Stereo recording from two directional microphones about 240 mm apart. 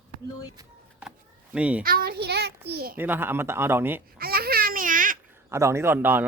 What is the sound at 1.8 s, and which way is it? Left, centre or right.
A child's voice, right.